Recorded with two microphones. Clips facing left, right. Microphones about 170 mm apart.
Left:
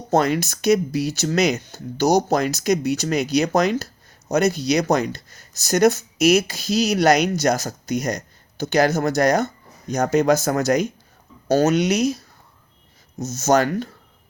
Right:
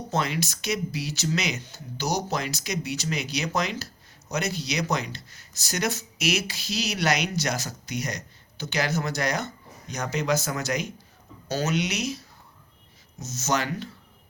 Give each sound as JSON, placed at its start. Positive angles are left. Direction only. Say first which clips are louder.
{"t": 0.1, "sound": "speech", "louder": "left 10 dB", "side_deg": 45}